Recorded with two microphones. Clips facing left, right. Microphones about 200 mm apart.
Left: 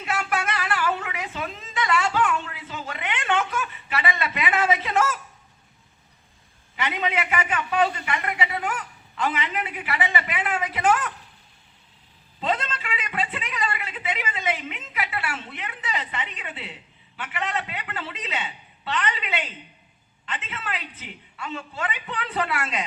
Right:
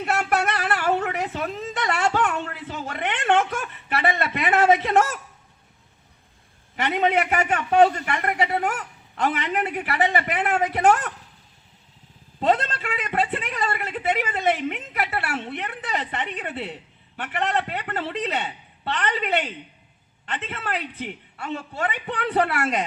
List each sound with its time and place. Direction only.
0.0 s a sound: 55° right (ahead or behind)
6.7 s a man's voice: 55° right (ahead or behind)
12.4 s a man's voice: 50° right (ahead or behind)